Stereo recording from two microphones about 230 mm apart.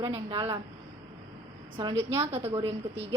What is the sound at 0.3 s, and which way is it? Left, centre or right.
Speech, right.